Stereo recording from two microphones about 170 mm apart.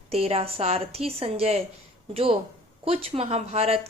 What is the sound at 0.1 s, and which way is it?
A woman's voice, 35° right (ahead or behind).